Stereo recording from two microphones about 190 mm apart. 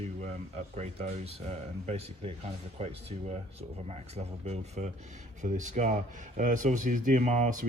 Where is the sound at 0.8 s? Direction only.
35° right (ahead or behind).